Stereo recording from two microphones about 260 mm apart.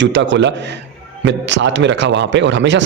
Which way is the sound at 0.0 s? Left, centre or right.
Right.